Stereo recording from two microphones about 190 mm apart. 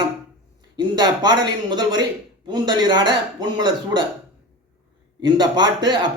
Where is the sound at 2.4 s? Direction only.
25° right (ahead or behind).